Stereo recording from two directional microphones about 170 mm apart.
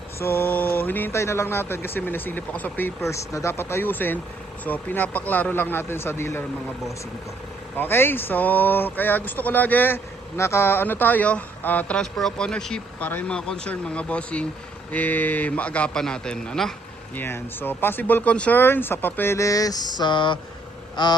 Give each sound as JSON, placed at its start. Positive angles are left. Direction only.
{"t": 0.2, "sound": "speech", "side_deg": 15}
{"t": 7.8, "sound": "speech", "side_deg": 10}
{"t": 20.9, "sound": "quack", "side_deg": 25}